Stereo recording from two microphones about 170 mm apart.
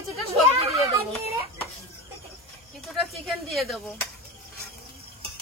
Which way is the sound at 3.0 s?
Centre (ahead or behind).